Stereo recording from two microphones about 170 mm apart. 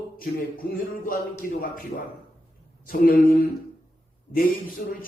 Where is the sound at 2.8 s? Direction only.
60° left (ahead or behind).